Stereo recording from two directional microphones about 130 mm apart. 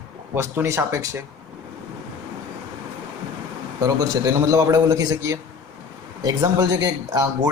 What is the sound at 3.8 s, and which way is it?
Speech, 25° right (ahead or behind).